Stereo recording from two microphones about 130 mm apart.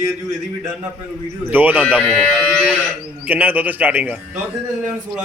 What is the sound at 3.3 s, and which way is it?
A man's voice, 15° right (ahead or behind).